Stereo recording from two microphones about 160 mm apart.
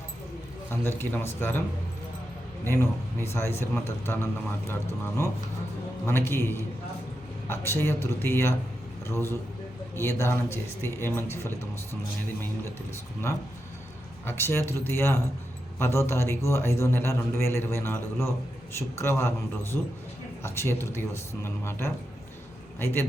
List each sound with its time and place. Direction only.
0.7 s a man's voice: 15° left (ahead or behind)
2.6 s a man's voice: 15° left (ahead or behind)
14.3 s a man's voice: 15° left (ahead or behind)